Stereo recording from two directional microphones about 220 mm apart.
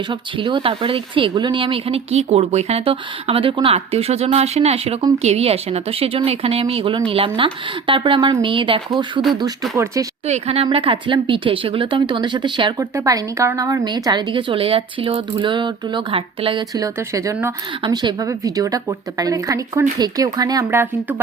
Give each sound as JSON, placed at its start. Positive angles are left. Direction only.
{"t": 0.1, "sound": "speech", "side_deg": -20}
{"t": 10.2, "sound": "speech", "side_deg": -30}